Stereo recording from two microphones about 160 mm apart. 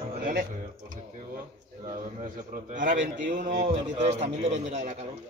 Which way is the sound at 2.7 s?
50° right (ahead or behind).